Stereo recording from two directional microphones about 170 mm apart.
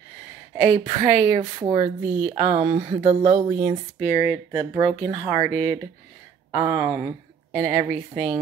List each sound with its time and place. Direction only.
0.6 s a woman's voice: 15° right (ahead or behind)
4.0 s a woman's voice: 15° right (ahead or behind)
6.5 s a woman's voice: 25° right (ahead or behind)